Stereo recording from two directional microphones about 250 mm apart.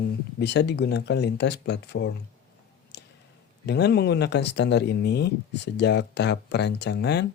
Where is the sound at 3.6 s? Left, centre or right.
Left.